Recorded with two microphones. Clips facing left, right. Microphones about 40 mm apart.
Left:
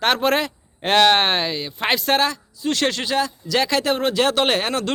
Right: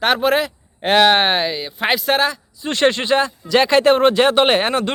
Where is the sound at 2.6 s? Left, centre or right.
Right.